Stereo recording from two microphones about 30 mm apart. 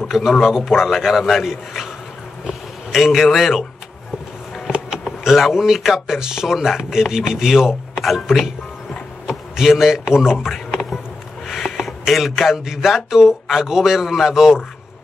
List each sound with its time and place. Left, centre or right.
0.1 s speech: right
0.7 s speech: centre
1.0 s speech: centre
4.7 s a sound: right
5.2 s speech: centre
6.0 s speech: right
7.9 s speech: centre
9.3 s speech: centre
10.3 s speech: centre
11.4 s a sound: centre
12.1 s speech: centre